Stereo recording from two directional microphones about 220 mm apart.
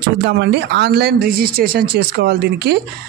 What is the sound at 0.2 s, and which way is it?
Speech, 50° right (ahead or behind).